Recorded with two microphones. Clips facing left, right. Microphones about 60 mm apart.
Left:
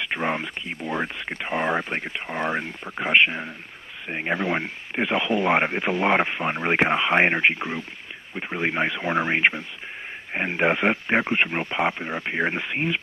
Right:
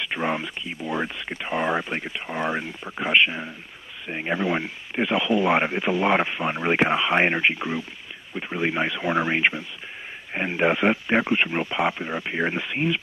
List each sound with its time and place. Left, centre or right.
0.0 s speech: left
11.8 s speech: left
12.4 s speech: left